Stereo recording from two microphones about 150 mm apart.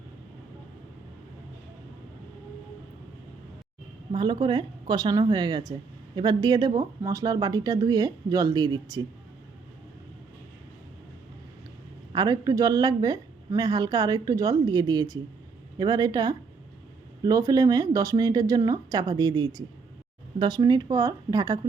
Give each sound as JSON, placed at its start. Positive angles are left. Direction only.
{"t": 4.1, "sound": "a woman's voice", "side_deg": -30}
{"t": 12.1, "sound": "a woman's voice", "side_deg": -25}